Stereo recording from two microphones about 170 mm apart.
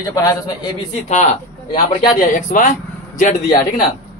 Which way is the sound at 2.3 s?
50° left (ahead or behind).